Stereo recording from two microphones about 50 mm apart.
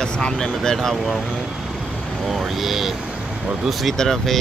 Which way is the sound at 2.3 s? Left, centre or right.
Centre.